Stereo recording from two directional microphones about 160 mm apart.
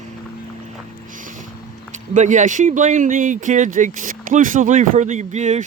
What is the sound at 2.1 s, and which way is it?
Speech, 50° right (ahead or behind).